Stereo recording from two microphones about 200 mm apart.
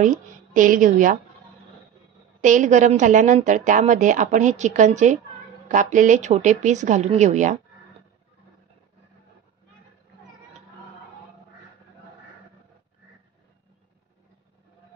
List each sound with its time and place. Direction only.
0.6 s a woman's voice: 40° right (ahead or behind)
2.4 s a woman's voice: 40° right (ahead or behind)